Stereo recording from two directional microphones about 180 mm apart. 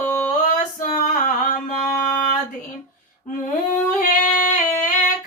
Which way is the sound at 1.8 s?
Centre (ahead or behind).